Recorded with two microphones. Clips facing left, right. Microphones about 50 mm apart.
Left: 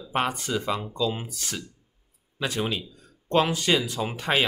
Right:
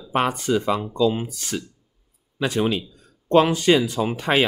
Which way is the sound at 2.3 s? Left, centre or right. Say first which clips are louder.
Right 6 dB; right.